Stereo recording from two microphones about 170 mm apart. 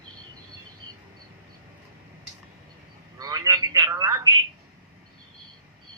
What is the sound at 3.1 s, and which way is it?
Telephone, 20° right (ahead or behind).